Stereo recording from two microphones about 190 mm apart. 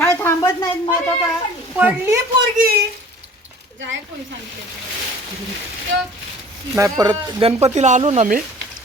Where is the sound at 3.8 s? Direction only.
75° right (ahead or behind).